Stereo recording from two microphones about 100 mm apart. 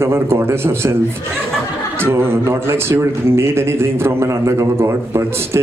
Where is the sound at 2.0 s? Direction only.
25° right (ahead or behind).